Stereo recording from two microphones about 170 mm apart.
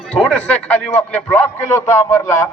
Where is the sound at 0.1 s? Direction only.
10° left (ahead or behind).